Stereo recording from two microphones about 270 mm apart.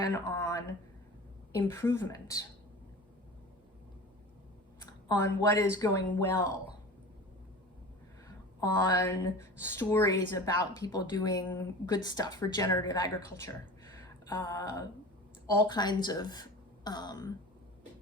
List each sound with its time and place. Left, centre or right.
0.0 s speech: centre
1.6 s a woman's voice: centre
4.9 s a woman's voice: centre
9.0 s a woman's voice: centre